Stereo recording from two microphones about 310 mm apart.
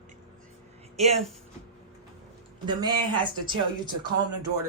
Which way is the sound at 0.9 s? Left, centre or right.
Right.